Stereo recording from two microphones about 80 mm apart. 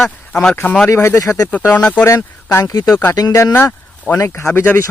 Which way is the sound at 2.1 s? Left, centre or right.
Left.